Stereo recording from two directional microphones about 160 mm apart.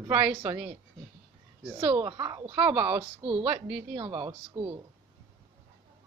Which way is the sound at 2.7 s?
10° right (ahead or behind).